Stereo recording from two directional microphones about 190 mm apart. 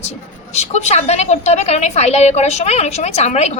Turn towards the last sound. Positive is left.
turn(degrees=35)  # may be behind; listen again after turning